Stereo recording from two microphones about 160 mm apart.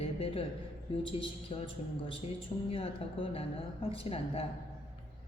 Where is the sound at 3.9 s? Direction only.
35° left (ahead or behind).